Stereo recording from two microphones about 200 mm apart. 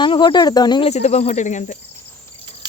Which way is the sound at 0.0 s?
25° left (ahead or behind).